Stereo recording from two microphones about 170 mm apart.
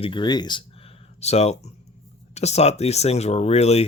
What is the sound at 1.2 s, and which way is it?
Speech, 40° left (ahead or behind).